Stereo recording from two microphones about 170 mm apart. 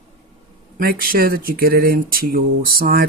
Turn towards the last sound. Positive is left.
turn(degrees=-60)  # may be behind; listen again after turning